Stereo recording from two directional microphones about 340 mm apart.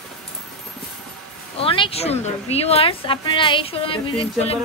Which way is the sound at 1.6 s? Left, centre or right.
Centre.